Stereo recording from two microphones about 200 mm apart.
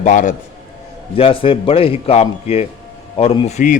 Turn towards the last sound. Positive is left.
turn(degrees=35)  # may be behind; listen again after turning